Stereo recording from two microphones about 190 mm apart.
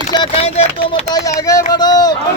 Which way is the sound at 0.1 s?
25° left (ahead or behind).